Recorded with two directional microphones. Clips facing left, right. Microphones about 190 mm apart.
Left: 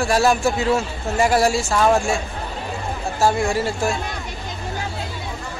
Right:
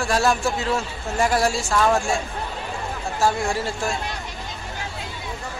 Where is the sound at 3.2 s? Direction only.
Centre (ahead or behind).